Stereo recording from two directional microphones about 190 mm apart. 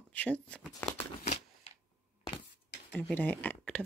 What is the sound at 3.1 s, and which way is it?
Speech, 10° left (ahead or behind).